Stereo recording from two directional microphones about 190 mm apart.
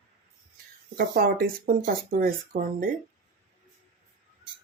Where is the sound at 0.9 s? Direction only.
50° right (ahead or behind).